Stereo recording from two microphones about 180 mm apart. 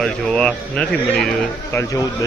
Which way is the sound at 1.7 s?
15° left (ahead or behind).